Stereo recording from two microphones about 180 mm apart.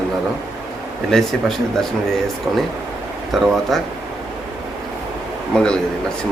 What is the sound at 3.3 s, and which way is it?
Speech, centre (ahead or behind).